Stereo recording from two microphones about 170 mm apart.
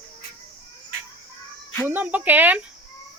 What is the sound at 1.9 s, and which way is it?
Speech, 10° right (ahead or behind).